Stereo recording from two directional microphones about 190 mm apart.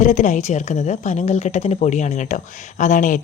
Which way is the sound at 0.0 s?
40° left (ahead or behind).